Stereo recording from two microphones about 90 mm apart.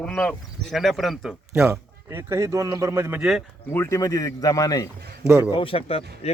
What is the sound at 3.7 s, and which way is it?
Speech, 30° left (ahead or behind).